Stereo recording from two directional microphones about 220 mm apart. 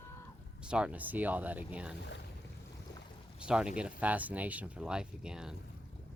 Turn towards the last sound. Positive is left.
turn(degrees=-5)  # may be behind; listen again after turning